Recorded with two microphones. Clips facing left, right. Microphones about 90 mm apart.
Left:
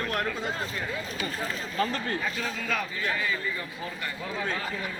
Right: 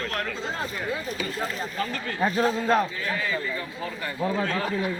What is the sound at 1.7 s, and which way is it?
Speech, 35° left (ahead or behind).